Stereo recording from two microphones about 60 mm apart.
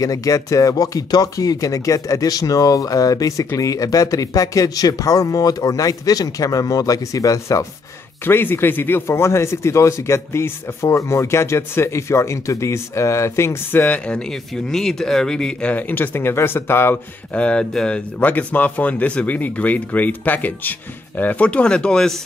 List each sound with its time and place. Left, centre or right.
0.0 s speech: left
8.3 s speech: left
13.7 s speech: left
14.0 s speech: centre
15.7 s speech: left
17.3 s speech: centre
18.2 s speech: left; by 22.2 s centre